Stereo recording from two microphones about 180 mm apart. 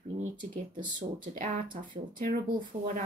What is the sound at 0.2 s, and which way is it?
Speech, 45° right (ahead or behind).